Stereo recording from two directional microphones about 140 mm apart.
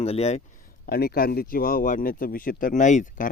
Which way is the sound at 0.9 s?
90° left.